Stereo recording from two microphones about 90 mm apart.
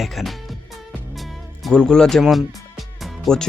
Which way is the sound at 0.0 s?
Centre (ahead or behind).